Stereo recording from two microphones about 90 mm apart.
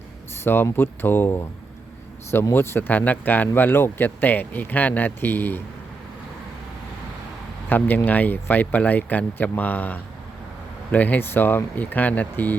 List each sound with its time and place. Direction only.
0.4 s speech: 25° left (ahead or behind)
7.7 s speech: 20° left (ahead or behind)